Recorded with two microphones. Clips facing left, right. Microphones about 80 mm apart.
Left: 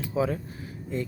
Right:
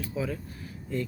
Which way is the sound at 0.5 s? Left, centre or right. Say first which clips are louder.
Left 1 dB; left.